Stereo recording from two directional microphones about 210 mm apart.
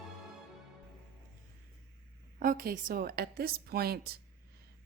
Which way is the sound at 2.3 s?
40° right (ahead or behind).